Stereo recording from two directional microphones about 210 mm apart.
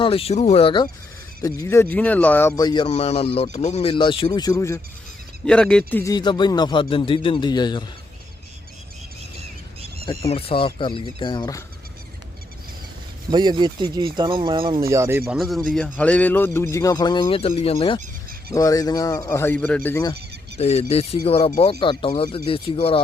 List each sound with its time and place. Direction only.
0.0 s speech: 25° left (ahead or behind)
5.5 s speech: 5° left (ahead or behind); by 7.9 s 20° left (ahead or behind)
10.1 s speech: 25° left (ahead or behind)
13.3 s speech: 20° right (ahead or behind)
15.3 s a man's voice: centre (ahead or behind); by 18.0 s 25° left (ahead or behind)
18.0 s a sound: 45° right (ahead or behind)
18.5 s speech: 15° left (ahead or behind)
20.6 s speech: 30° left (ahead or behind)